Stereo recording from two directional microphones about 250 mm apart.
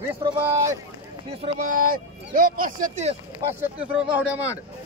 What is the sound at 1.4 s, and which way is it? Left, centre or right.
Speech, right.